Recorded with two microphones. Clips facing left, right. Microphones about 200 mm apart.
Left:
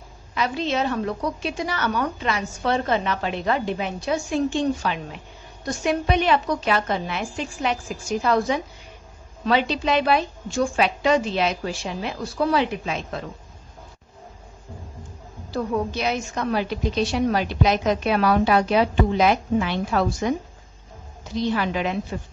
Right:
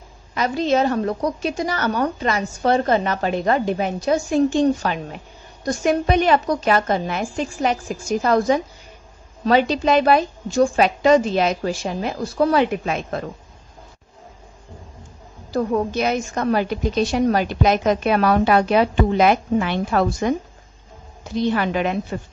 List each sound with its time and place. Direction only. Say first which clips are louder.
0.3 s a woman's voice: right 5 dB; 40° right (ahead or behind)
9.4 s a woman's voice: right 4 dB; 45° right (ahead or behind)
15.5 s a woman's voice: right 4 dB; 45° right (ahead or behind)
21.4 s a woman's voice: right 3 dB; 55° right (ahead or behind)